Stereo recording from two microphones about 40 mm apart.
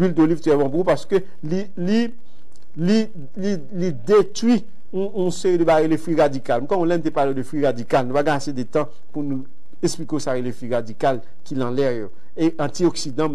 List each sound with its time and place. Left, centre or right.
0.0 s a man's voice: centre